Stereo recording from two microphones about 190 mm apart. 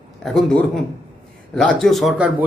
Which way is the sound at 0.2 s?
5° left (ahead or behind).